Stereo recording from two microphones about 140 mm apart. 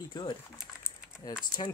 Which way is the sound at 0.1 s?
35° left (ahead or behind).